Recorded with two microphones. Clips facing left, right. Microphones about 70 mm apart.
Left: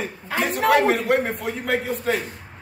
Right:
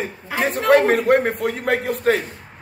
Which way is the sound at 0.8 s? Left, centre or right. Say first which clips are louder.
Right 4 dB; right.